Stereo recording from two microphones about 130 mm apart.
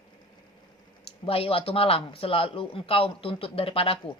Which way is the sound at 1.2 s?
45° left (ahead or behind).